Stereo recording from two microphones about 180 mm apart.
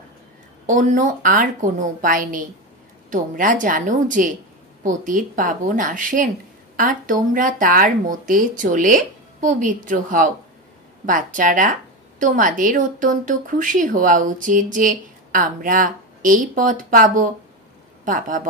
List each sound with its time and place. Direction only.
0.7 s a woman's voice: 45° right (ahead or behind)